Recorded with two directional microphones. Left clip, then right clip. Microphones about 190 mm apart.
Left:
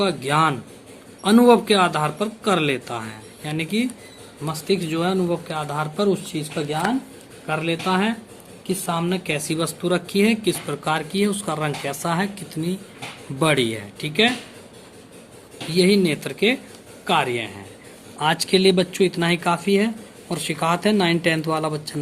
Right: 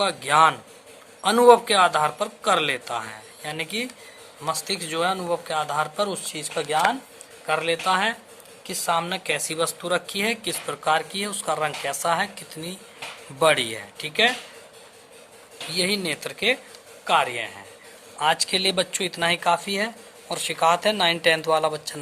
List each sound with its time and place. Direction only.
0.0 s speech: 25° right (ahead or behind)
15.7 s speech: 20° right (ahead or behind)